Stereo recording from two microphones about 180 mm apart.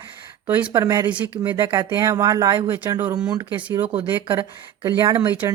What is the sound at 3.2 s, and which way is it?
Speech, 25° right (ahead or behind).